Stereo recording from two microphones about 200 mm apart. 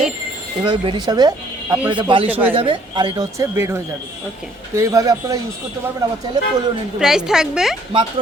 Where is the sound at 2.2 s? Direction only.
10° right (ahead or behind).